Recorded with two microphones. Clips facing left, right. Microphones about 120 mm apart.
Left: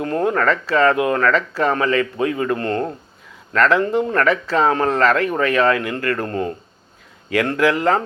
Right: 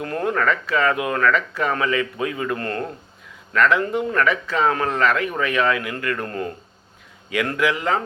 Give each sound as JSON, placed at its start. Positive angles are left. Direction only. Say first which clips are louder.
{"t": 0.0, "sound": "speech", "louder": "left 4 dB", "side_deg": 30}